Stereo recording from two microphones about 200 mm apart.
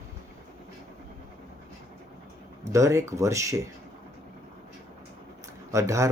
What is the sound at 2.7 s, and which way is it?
Speech, 15° right (ahead or behind).